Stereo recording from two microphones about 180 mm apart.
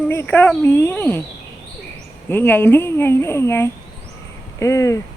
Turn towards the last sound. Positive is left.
turn(degrees=15)  # may be behind; listen again after turning